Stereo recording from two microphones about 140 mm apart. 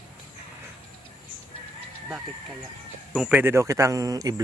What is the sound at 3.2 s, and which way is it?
A man's voice, 10° right (ahead or behind).